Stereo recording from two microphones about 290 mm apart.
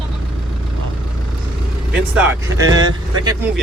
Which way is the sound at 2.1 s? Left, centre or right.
Centre.